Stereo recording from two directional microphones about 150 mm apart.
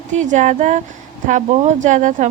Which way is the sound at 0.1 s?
55° right (ahead or behind).